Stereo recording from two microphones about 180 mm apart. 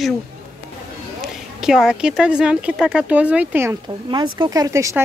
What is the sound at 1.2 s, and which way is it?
Speech, 5° right (ahead or behind).